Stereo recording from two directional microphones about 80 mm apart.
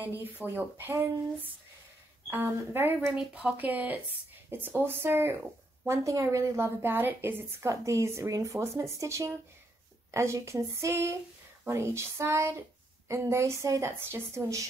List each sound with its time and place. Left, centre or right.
0.0 s speech: right
5.9 s a woman's voice: right
7.7 s a woman's voice: right